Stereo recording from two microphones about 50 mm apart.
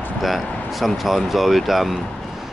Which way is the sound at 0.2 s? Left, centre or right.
Centre.